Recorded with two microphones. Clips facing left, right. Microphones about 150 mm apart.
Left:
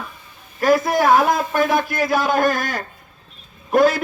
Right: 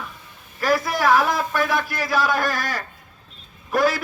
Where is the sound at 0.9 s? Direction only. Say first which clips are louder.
Left 4 dB; 45° left (ahead or behind).